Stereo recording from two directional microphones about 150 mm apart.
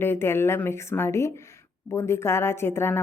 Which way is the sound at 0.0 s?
15° left (ahead or behind).